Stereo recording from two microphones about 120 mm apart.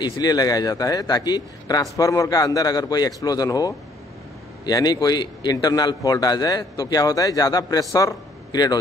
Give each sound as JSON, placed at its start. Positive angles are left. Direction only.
{"t": 0.0, "sound": "a man's voice", "side_deg": 35}